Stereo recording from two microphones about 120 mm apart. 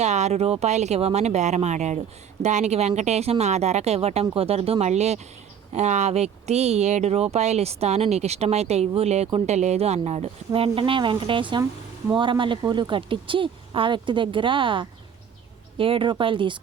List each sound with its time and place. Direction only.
0.0 s speech: 70° right (ahead or behind); by 16.6 s 45° right (ahead or behind)